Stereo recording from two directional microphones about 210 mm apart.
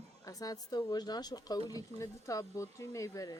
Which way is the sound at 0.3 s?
15° left (ahead or behind).